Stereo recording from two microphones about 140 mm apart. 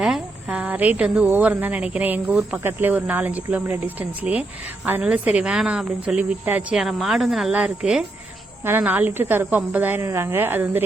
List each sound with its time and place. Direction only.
0.0 s a woman's voice: 5° right (ahead or behind)